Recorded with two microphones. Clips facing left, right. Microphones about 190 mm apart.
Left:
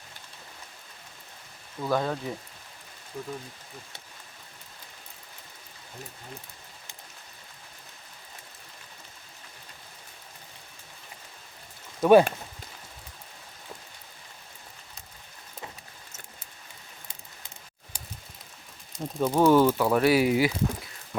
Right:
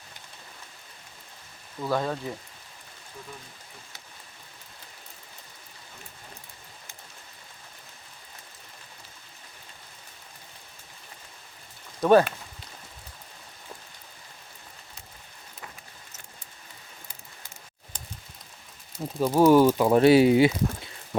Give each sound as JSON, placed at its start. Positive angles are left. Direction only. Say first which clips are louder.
{"t": 1.8, "sound": "speech", "louder": "even", "side_deg": 0}
{"t": 11.9, "sound": "speech", "louder": "left 1 dB", "side_deg": 10}
{"t": 18.9, "sound": "speech", "louder": "right 2 dB", "side_deg": -5}
{"t": 19.6, "sound": "speech", "louder": "right 4 dB", "side_deg": -20}